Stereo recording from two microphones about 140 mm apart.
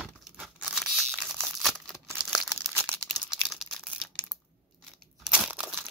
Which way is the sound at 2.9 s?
Centre (ahead or behind).